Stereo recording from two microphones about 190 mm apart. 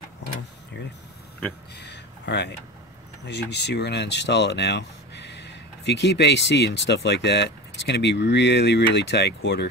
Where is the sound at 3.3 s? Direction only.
60° left (ahead or behind).